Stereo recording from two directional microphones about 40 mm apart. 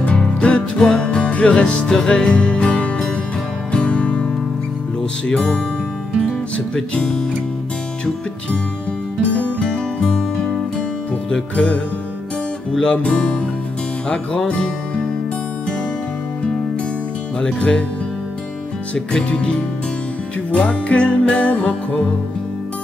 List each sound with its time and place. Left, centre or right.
0.0 s music: left
1.9 s music: centre
2.3 s music: left
5.3 s music: left
10.1 s music: centre
11.2 s music: left
12.8 s music: left
17.6 s music: left
18.9 s music: left